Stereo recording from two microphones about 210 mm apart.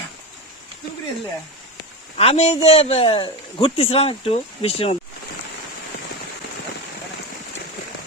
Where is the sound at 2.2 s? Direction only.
30° left (ahead or behind).